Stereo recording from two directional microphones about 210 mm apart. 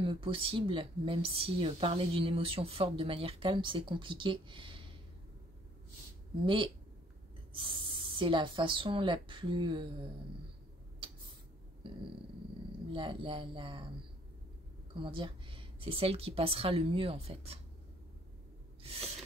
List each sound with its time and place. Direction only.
0.0 s speech: 25° right (ahead or behind)
6.4 s speech: 25° right (ahead or behind)
11.8 s dog: 25° right (ahead or behind)
12.9 s speech: 25° right (ahead or behind)
15.0 s speech: 25° right (ahead or behind)
18.8 s a sound: 30° right (ahead or behind)